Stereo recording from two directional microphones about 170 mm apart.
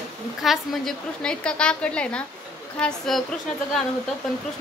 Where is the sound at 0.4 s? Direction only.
Centre (ahead or behind).